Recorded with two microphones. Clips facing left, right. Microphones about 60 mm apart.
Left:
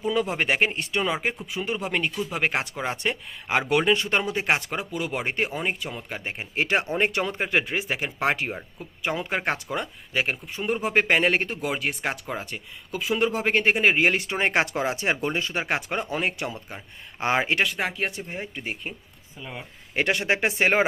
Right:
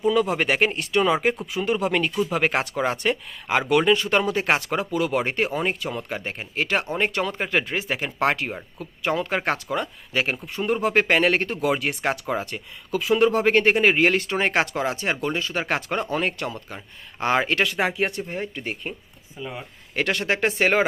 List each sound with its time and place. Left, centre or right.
0.1 s speech: centre
1.0 s speech: centre
3.0 s speech: centre
4.2 s speech: centre
6.4 s speech: left
7.3 s speech: centre
15.5 s speech: centre
17.7 s speech: centre
19.4 s speech: centre
20.0 s speech: centre